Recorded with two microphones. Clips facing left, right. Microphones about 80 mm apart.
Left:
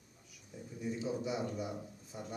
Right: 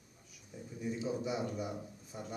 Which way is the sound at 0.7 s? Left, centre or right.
Centre.